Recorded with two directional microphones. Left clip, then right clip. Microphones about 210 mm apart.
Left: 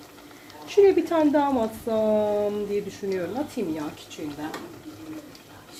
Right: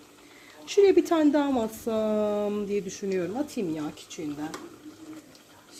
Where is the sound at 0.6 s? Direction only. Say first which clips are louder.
Left 2 dB; 50° right (ahead or behind).